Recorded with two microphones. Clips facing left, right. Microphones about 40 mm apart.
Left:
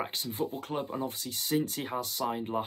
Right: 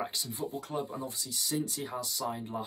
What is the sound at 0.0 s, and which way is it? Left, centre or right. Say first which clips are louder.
Speech: left 3 dB; left.